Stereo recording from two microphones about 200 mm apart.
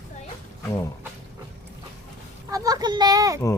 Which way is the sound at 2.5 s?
15° right (ahead or behind).